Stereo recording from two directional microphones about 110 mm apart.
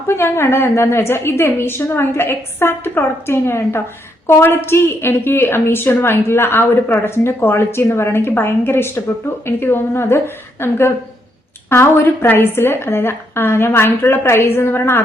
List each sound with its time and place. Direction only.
0.1 s a woman's voice: 20° left (ahead or behind)